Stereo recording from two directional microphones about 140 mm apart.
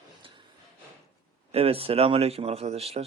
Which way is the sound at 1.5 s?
45° right (ahead or behind).